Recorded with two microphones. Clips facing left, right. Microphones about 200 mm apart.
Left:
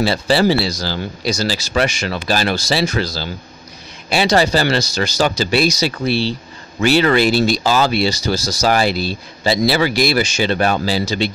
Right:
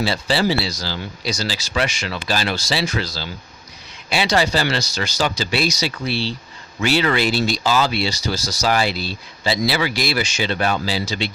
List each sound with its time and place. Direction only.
0.0 s speech: 50° left (ahead or behind)